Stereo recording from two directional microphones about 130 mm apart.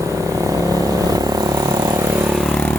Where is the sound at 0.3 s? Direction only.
25° right (ahead or behind).